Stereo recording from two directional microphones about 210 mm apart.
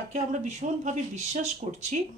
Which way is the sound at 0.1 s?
35° right (ahead or behind).